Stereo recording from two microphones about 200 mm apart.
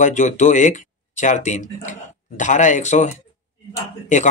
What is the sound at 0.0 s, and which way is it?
Speech, 40° left (ahead or behind).